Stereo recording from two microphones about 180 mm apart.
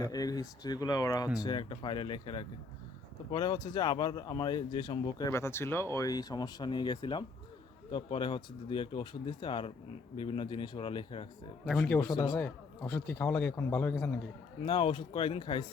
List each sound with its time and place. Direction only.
0.0 s speech: 20° left (ahead or behind)
11.6 s a man's voice: centre (ahead or behind)
12.1 s speech: 25° left (ahead or behind)
13.1 s speech: 10° left (ahead or behind)
14.6 s speech: 30° left (ahead or behind)